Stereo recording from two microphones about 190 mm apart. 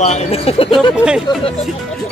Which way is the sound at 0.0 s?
35° left (ahead or behind).